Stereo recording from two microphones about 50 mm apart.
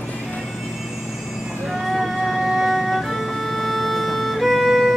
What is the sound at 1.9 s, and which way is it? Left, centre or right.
Music, centre.